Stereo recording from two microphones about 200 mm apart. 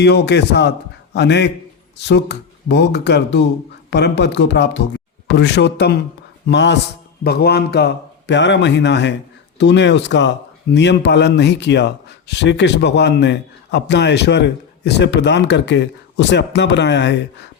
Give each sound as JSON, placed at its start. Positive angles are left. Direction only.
{"t": 0.0, "sound": "a man's voice", "side_deg": 60}